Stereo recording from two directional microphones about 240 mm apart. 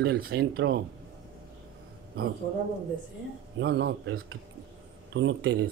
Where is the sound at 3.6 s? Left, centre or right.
Right.